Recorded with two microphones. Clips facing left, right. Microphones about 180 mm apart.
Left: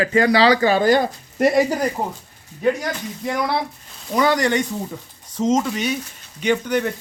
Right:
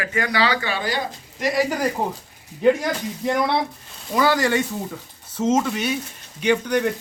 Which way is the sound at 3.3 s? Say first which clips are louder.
Right 1 dB; centre (ahead or behind).